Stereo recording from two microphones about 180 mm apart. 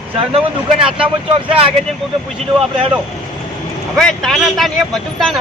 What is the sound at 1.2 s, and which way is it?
Speech, 30° right (ahead or behind).